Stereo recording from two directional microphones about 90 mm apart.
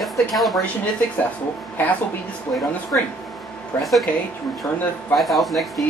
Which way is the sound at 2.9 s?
20° left (ahead or behind).